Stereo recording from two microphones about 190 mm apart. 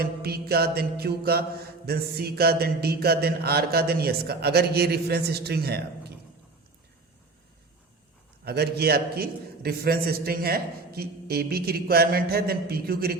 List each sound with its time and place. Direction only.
0.0 s mantra: 55° right (ahead or behind)
8.4 s mantra: 60° right (ahead or behind)